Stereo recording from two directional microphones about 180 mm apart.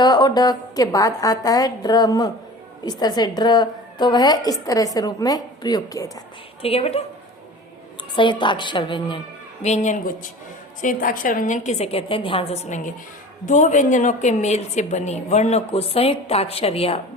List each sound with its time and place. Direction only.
0.0 s a woman's voice: 25° left (ahead or behind)
6.6 s a woman's voice: 35° left (ahead or behind)
8.1 s a woman's voice: 25° left (ahead or behind)